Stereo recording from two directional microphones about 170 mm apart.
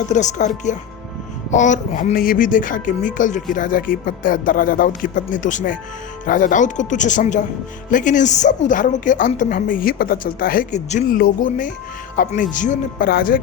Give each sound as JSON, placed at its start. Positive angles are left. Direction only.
{"t": 0.1, "sound": "speech", "side_deg": 45}
{"t": 2.1, "sound": "speech", "side_deg": 55}